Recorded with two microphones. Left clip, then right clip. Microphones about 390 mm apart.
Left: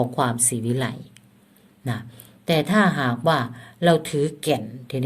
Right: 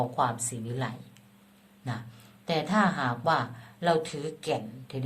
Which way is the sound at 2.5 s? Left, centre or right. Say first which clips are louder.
Left 6 dB; left.